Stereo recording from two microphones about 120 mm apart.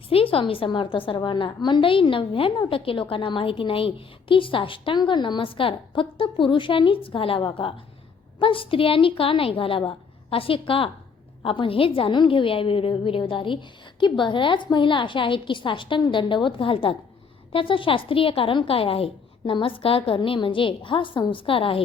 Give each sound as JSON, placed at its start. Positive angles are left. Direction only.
{"t": 0.1, "sound": "a woman's voice", "side_deg": 50}